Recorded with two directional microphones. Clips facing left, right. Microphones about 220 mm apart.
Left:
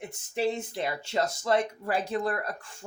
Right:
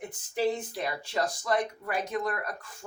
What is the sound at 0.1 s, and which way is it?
Speech, 25° left (ahead or behind).